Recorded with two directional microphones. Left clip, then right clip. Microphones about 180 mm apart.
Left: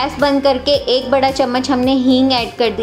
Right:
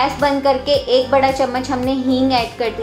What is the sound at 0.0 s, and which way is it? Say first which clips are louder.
A woman's voice: left 1 dB; 40° left (ahead or behind).